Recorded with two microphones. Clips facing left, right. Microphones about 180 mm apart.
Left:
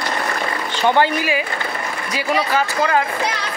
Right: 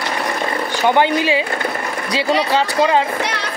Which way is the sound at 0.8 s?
15° right (ahead or behind).